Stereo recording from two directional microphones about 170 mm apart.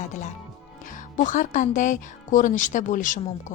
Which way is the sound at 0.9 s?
50° left (ahead or behind).